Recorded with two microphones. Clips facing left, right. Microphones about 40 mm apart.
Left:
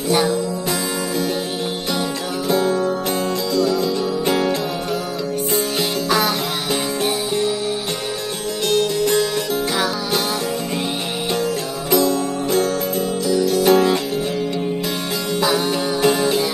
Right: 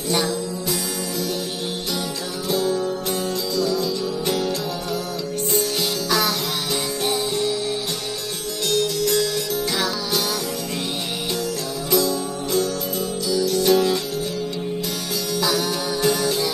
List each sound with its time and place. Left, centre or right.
0.1 s music: centre
2.5 s music: left
6.0 s music: left
8.6 s music: left
11.9 s music: left
15.4 s music: left